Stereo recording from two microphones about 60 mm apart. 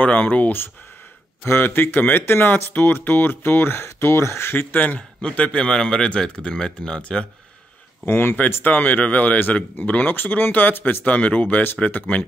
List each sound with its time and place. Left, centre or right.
0.0 s speech: left
1.5 s speech: left; by 7.2 s centre
8.0 s speech: left